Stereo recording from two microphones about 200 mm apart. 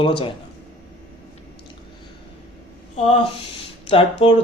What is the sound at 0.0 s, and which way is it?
Speech, 25° left (ahead or behind).